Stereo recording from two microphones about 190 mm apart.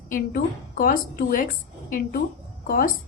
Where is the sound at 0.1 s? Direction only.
50° left (ahead or behind).